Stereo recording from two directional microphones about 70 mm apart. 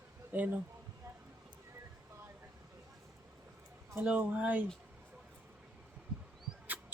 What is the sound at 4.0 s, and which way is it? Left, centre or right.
Speech, right.